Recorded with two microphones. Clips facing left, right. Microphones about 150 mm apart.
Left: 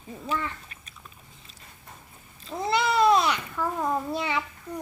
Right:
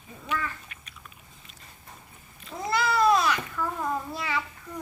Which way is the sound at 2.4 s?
25° left (ahead or behind).